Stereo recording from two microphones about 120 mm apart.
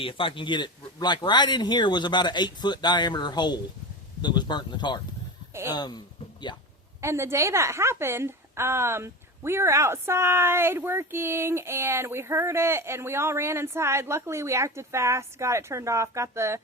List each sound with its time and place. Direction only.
0.0 s speech: 45° left (ahead or behind)
7.0 s a woman's voice: 20° right (ahead or behind)